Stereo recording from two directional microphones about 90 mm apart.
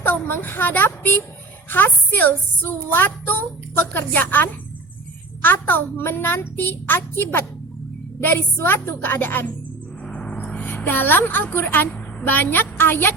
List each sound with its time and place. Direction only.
0.0 s a woman's voice: 20° left (ahead or behind)
10.1 s a sound: 15° left (ahead or behind)
12.2 s a woman's voice: 20° left (ahead or behind)